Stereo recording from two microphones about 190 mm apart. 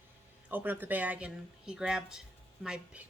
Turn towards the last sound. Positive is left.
turn(degrees=-5)  # may be behind; listen again after turning